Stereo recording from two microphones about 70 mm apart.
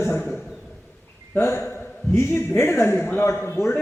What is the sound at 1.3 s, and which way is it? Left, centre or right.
A man's voice, left.